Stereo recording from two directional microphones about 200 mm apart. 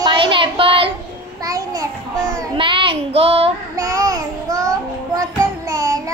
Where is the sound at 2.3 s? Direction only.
25° right (ahead or behind).